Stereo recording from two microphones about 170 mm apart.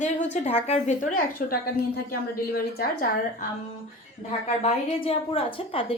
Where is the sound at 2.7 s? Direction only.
60° left (ahead or behind).